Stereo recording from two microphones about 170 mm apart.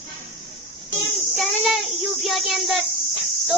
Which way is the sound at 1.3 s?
Centre (ahead or behind).